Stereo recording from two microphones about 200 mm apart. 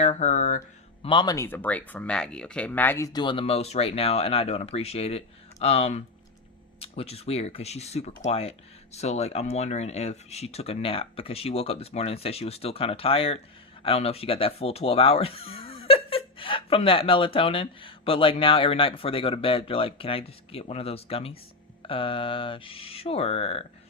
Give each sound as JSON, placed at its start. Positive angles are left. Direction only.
{"t": 0.0, "sound": "speech", "side_deg": 35}
{"t": 1.0, "sound": "speech", "side_deg": 25}